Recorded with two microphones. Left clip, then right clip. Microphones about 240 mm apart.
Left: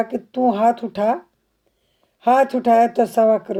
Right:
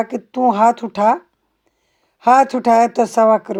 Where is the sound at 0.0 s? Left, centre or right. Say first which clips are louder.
Right 3 dB; centre.